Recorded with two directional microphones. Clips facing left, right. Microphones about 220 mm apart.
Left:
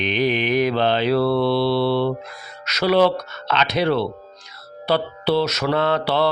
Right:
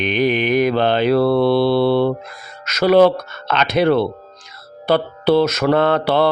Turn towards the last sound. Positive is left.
turn(degrees=-50)  # may be behind; listen again after turning